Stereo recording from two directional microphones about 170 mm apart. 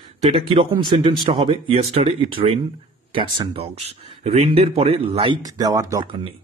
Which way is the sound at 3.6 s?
40° right (ahead or behind).